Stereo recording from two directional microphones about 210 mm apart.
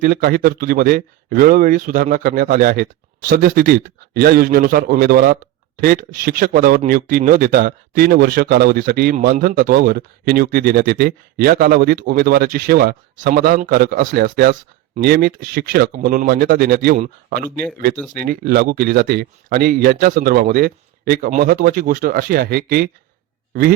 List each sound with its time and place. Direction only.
0.0 s a man's voice: 45° right (ahead or behind)